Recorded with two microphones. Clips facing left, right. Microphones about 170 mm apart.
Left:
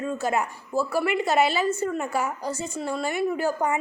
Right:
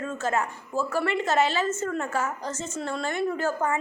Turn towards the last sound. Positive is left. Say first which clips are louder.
# left 2 dB
turn(degrees=15)  # may be behind; listen again after turning